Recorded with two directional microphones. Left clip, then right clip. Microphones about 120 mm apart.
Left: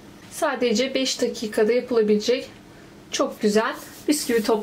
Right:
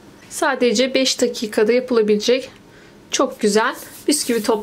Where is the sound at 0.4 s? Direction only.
40° right (ahead or behind).